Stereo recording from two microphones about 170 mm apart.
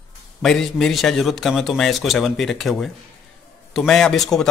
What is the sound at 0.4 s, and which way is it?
A man's voice, centre (ahead or behind).